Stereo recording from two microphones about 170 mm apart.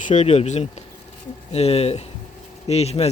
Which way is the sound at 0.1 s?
40° left (ahead or behind).